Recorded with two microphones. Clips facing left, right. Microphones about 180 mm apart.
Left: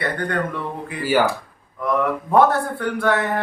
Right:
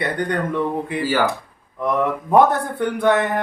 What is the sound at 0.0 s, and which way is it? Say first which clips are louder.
Speech: right 2 dB; 20° right (ahead or behind).